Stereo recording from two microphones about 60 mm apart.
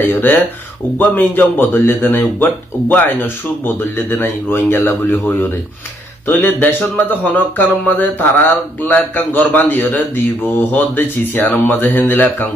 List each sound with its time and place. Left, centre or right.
0.0 s speech: left